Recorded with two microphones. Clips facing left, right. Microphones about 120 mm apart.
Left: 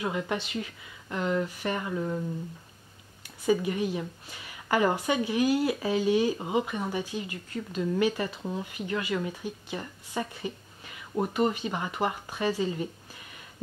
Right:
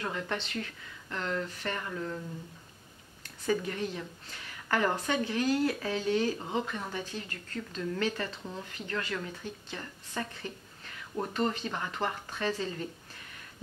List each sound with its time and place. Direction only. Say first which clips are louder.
0.0 s speech: left 4 dB; 10° left (ahead or behind)
3.4 s speech: left 5 dB; 10° left (ahead or behind)